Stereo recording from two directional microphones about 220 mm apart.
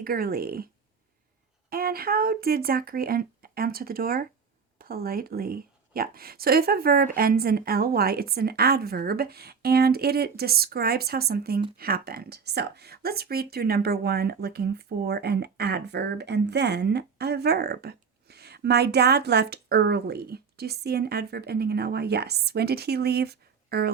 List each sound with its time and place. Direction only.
0.0 s speech: 45° right (ahead or behind)
1.7 s speech: 40° right (ahead or behind)